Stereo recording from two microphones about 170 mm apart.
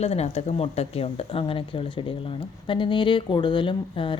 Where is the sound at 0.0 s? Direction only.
40° left (ahead or behind).